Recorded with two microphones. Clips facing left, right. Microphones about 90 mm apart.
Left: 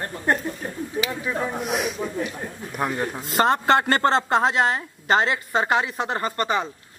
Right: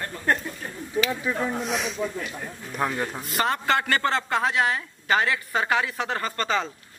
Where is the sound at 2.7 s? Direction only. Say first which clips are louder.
Left 1 dB; 10° left (ahead or behind).